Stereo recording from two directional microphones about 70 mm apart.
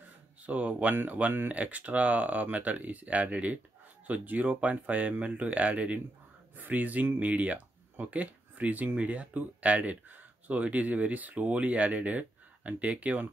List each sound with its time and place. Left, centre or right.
0.5 s speech: right